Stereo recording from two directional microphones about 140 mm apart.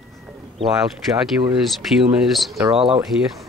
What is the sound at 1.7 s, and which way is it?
Speech, centre (ahead or behind).